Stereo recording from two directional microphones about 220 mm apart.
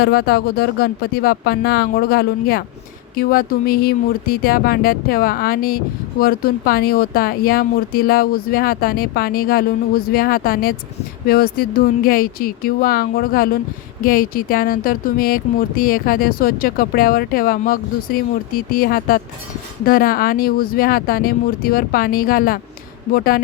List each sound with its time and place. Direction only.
0.0 s speech: 45° left (ahead or behind)